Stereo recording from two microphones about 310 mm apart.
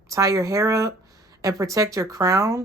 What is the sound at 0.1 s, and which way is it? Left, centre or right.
Speech, centre.